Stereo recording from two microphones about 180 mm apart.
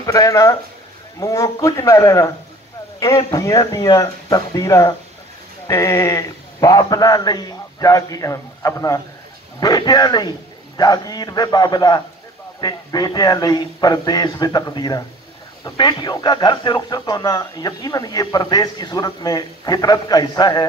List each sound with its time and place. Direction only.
0.0 s speech: 20° left (ahead or behind)